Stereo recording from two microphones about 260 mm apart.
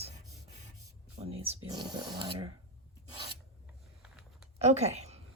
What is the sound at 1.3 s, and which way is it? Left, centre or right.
Speech, right.